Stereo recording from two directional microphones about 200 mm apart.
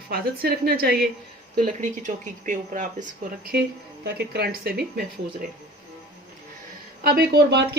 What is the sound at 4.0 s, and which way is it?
Speech, 55° right (ahead or behind).